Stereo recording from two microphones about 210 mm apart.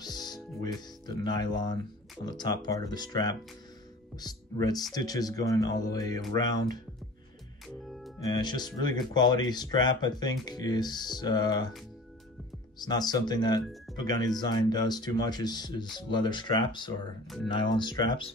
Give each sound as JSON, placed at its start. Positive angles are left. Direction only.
{"t": 0.0, "sound": "music", "side_deg": 20}
{"t": 1.2, "sound": "speech", "side_deg": 20}
{"t": 7.6, "sound": "music", "side_deg": 0}
{"t": 8.2, "sound": "speech", "side_deg": 20}
{"t": 12.7, "sound": "speech", "side_deg": 20}